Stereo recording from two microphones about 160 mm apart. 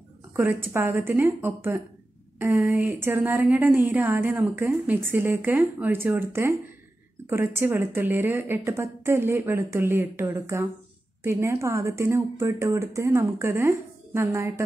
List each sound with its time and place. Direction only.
0.4 s a woman's voice: 15° right (ahead or behind)